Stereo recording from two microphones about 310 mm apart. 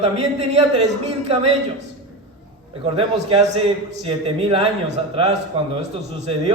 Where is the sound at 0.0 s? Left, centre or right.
Right.